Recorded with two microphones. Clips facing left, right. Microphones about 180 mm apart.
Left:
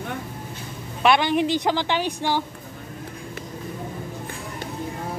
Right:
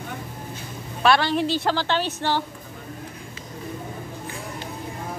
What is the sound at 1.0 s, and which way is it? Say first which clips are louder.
A woman's voice: left 1 dB; 20° left (ahead or behind).